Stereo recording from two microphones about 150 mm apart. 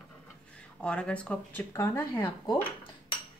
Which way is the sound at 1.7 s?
20° left (ahead or behind).